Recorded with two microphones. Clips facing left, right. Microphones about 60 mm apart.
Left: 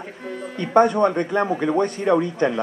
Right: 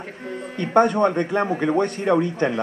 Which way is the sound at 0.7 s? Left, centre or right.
Right.